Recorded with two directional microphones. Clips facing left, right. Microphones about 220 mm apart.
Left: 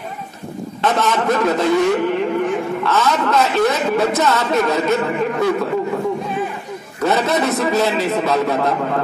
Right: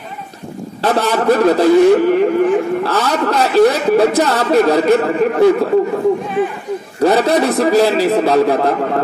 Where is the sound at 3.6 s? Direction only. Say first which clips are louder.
Right 6 dB; 30° right (ahead or behind).